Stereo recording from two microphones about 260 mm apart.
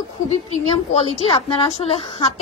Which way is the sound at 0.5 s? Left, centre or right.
Left.